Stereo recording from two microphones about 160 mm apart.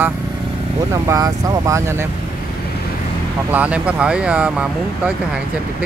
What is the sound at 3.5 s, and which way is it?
Speech, 10° right (ahead or behind).